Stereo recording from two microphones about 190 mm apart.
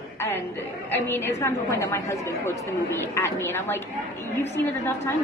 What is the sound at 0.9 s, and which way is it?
A woman's voice, 10° left (ahead or behind).